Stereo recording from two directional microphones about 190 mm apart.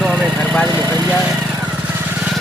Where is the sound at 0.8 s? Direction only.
20° right (ahead or behind).